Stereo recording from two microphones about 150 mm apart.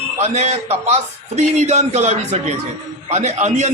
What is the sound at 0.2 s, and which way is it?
A man's voice, 50° right (ahead or behind).